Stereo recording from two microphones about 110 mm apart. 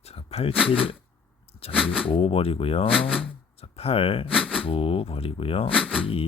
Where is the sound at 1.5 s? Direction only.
65° left (ahead or behind).